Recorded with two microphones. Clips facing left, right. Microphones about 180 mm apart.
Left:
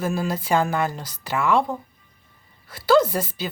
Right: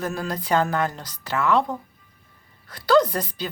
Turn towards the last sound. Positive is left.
turn(degrees=5)  # may be behind; listen again after turning